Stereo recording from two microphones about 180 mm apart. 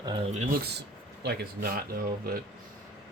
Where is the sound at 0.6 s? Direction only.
65° right (ahead or behind).